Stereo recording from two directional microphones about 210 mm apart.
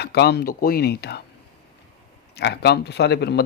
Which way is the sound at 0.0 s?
50° left (ahead or behind).